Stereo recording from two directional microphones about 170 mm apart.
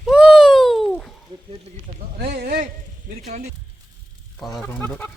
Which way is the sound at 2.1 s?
65° right (ahead or behind).